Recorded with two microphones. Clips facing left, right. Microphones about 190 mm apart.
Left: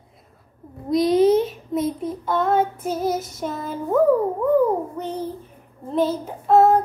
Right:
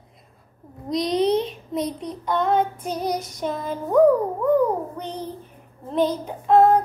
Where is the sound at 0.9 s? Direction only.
5° left (ahead or behind).